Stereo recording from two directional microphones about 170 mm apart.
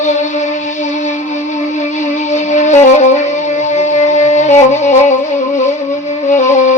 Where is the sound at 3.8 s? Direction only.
45° left (ahead or behind).